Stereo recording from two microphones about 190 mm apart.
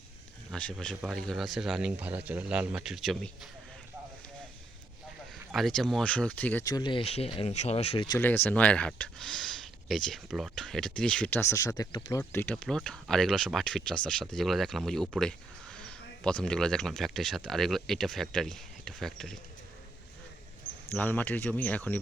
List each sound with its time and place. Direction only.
0.5 s speech: 5° left (ahead or behind)
5.5 s speech: centre (ahead or behind)
6.7 s speech: 20° left (ahead or behind)
8.2 s speech: 10° left (ahead or behind)
20.9 s speech: 10° left (ahead or behind)